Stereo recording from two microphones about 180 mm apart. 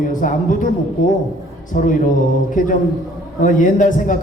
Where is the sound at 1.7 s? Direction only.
45° left (ahead or behind).